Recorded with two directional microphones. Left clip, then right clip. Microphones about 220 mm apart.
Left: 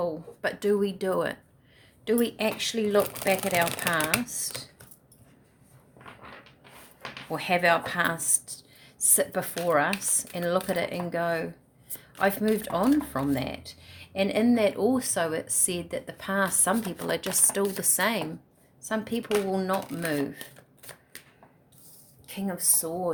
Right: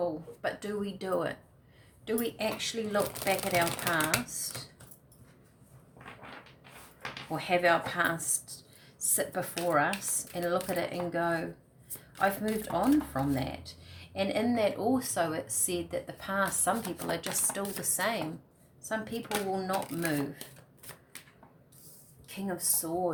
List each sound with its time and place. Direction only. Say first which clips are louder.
0.0 s speech: left 3 dB; 50° left (ahead or behind)
7.3 s speech: left 3 dB; 50° left (ahead or behind)
20.9 s shuffling cards: left 3 dB; 20° left (ahead or behind)
22.3 s speech: left 4 dB; 50° left (ahead or behind)